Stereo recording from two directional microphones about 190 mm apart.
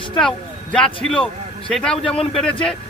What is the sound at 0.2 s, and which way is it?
Speech, 5° left (ahead or behind).